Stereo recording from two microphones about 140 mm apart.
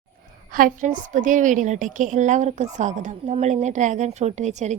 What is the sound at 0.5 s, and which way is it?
A woman's voice, 75° right (ahead or behind).